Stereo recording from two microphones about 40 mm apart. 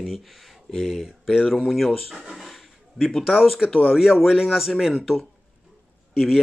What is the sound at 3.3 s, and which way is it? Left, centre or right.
Speech, centre.